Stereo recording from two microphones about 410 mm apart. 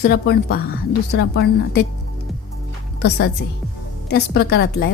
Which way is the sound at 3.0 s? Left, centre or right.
Left.